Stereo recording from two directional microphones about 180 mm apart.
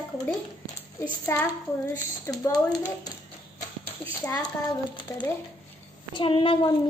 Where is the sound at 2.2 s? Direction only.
20° left (ahead or behind).